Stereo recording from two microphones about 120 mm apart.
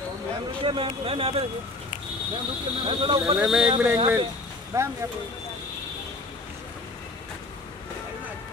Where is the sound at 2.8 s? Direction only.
45° right (ahead or behind).